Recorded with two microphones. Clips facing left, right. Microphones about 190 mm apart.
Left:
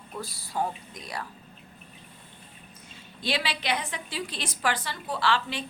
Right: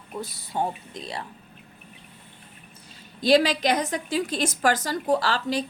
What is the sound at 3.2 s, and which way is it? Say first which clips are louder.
A woman's voice: right 11 dB; 40° right (ahead or behind).